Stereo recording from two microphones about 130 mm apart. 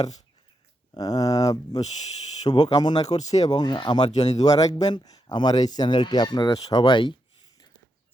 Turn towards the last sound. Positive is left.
turn(degrees=40)  # may be behind; listen again after turning